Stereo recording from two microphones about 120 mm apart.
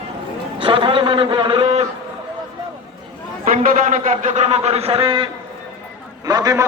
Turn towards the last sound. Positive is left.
turn(degrees=-30)  # may be behind; listen again after turning